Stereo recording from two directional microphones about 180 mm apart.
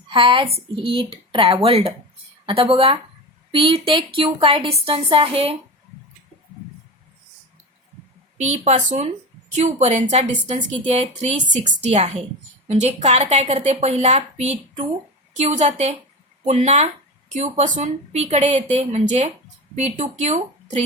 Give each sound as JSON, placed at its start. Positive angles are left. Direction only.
{"t": 0.1, "sound": "a woman's voice", "side_deg": -30}
{"t": 8.4, "sound": "a woman's voice", "side_deg": -40}